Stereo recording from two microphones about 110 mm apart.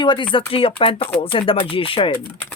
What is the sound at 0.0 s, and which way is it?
Speech, 45° left (ahead or behind).